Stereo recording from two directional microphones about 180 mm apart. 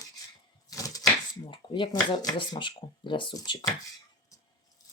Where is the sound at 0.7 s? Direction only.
20° left (ahead or behind).